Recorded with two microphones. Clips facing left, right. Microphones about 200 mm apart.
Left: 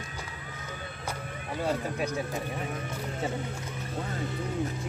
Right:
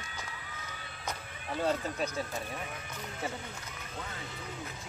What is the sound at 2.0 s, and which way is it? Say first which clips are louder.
Speech: left 4 dB; 15° left (ahead or behind).